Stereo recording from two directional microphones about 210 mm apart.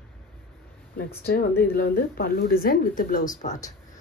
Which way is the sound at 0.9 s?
45° left (ahead or behind).